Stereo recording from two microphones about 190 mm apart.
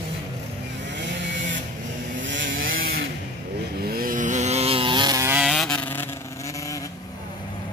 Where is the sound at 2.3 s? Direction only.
75° right (ahead or behind).